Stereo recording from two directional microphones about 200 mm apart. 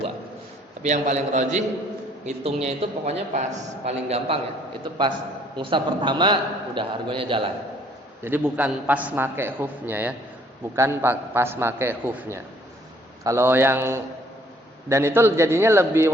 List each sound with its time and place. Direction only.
0.8 s a man's voice: 35° right (ahead or behind)
8.2 s a man's voice: 10° right (ahead or behind)